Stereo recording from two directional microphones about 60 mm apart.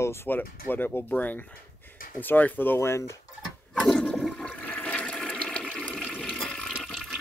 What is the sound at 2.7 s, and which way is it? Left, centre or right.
Speech, left.